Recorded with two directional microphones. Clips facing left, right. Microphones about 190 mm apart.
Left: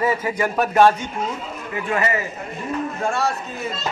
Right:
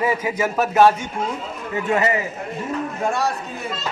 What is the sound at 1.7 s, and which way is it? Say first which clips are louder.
Speech: right 3 dB; 25° right (ahead or behind).